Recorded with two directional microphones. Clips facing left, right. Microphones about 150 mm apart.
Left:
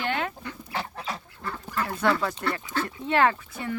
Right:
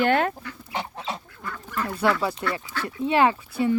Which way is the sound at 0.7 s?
20° right (ahead or behind).